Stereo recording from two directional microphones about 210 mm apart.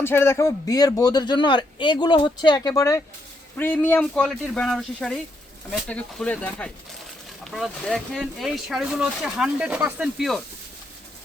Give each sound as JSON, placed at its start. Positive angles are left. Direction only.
{"t": 0.0, "sound": "speech", "side_deg": 10}